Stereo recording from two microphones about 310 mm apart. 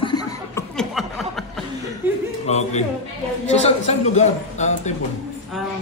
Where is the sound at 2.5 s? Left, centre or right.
Left.